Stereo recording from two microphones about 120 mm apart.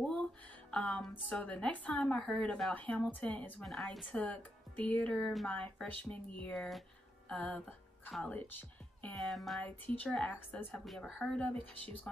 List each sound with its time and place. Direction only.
0.0 s music: 5° left (ahead or behind)
1.3 s speech: 10° left (ahead or behind)
4.1 s speech: 10° left (ahead or behind)
9.1 s music: centre (ahead or behind)
9.6 s speech: 15° left (ahead or behind)